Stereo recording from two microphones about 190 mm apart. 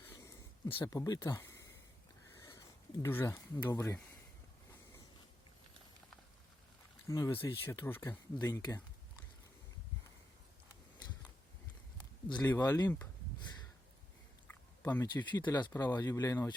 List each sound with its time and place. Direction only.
0.1 s a sound: 15° left (ahead or behind)
0.8 s speech: 20° left (ahead or behind)
7.1 s speech: 15° left (ahead or behind)
11.9 s speech: 20° left (ahead or behind)
14.4 s chewing: 10° left (ahead or behind)
15.0 s speech: 25° left (ahead or behind)